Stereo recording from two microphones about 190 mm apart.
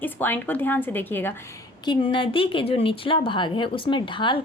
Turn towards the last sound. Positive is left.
turn(degrees=25)  # may be behind; listen again after turning